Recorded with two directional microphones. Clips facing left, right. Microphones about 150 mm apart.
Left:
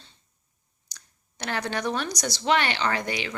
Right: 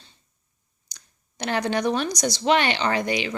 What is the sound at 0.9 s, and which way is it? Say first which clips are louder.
Speech: left 1 dB; 20° right (ahead or behind).